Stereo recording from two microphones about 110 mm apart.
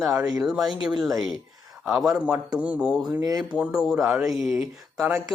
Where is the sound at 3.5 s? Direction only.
10° right (ahead or behind).